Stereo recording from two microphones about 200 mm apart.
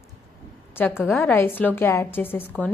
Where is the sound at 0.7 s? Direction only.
10° left (ahead or behind).